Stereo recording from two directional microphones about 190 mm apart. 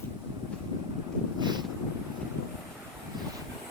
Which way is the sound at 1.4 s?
20° right (ahead or behind).